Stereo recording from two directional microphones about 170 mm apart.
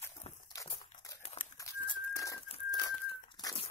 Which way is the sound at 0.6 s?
20° left (ahead or behind).